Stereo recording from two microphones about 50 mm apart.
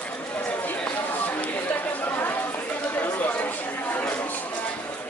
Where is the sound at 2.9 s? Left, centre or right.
Left.